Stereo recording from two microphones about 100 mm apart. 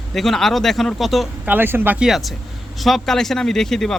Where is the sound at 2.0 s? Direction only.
Centre (ahead or behind).